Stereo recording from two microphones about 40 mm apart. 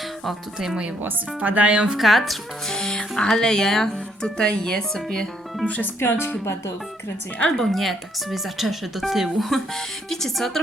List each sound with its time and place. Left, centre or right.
1.4 s speech: right
1.7 s a woman's voice: right
2.0 s speech: centre
2.6 s speech: centre
6.0 s speech: left
7.5 s speech: centre
9.4 s speech: centre